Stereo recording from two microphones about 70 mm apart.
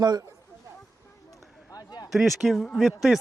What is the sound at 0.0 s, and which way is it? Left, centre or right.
Speech, right.